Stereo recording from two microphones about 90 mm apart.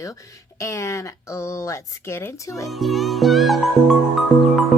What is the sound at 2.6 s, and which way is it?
Music, centre (ahead or behind).